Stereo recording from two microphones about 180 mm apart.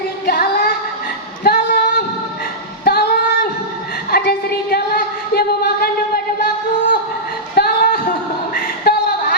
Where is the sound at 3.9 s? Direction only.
60° left (ahead or behind).